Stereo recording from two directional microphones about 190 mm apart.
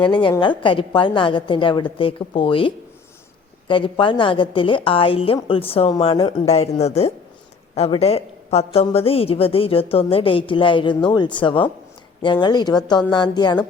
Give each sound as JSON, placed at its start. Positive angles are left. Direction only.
{"t": 0.0, "sound": "a woman's voice", "side_deg": 25}